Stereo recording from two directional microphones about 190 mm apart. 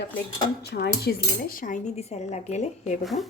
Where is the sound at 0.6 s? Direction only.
55° left (ahead or behind); by 3.1 s 40° left (ahead or behind).